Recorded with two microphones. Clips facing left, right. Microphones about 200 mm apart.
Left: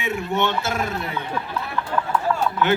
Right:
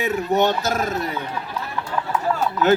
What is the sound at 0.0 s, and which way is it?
A man's voice, 40° right (ahead or behind).